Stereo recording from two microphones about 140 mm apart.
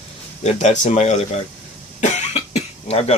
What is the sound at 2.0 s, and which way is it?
Cough, 55° left (ahead or behind).